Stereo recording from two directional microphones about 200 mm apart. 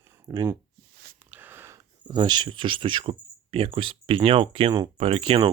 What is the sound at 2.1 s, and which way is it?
Speech, 20° right (ahead or behind).